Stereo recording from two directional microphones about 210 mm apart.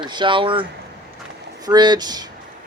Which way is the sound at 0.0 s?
20° right (ahead or behind).